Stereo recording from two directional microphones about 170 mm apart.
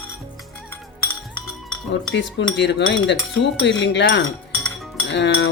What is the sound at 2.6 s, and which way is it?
Speech, 90° left.